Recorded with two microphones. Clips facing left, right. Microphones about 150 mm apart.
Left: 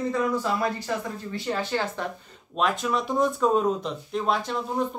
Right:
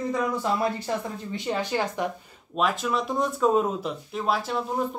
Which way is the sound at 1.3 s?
15° right (ahead or behind).